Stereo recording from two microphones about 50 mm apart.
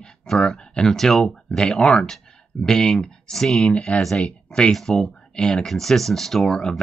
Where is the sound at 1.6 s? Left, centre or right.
Centre.